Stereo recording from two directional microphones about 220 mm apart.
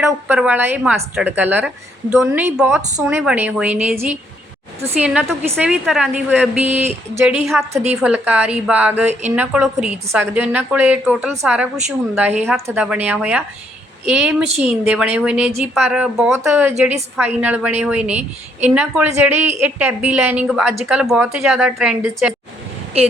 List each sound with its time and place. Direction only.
0.0 s a woman's voice: 5° right (ahead or behind)